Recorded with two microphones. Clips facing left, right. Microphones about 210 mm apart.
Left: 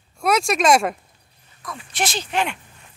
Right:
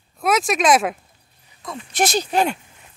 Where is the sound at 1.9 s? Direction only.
40° right (ahead or behind).